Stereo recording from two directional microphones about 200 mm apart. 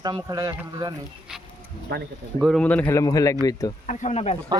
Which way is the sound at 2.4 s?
Centre (ahead or behind).